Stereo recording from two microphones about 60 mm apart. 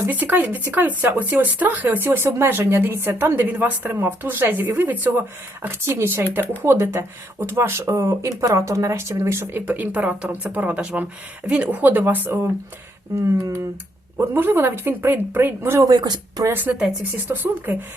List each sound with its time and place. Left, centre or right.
0.1 s speech: right
9.6 s speech: right
14.2 s speech: right
15.8 s speech: right
16.7 s speech: right